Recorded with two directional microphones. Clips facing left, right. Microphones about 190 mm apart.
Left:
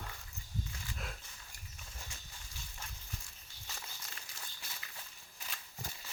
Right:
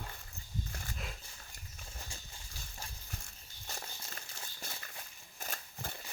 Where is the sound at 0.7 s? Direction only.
50° right (ahead or behind).